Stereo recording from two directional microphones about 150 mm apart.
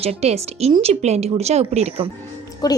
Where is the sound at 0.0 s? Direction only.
45° right (ahead or behind).